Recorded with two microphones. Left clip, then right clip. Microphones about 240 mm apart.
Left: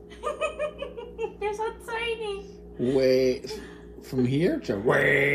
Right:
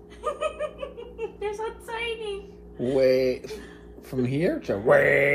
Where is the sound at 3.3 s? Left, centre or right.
Right.